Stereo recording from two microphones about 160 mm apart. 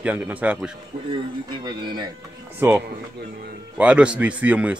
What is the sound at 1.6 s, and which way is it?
Speech, 30° right (ahead or behind).